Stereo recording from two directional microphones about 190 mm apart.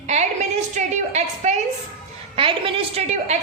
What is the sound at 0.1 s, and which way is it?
A woman's voice, 35° right (ahead or behind).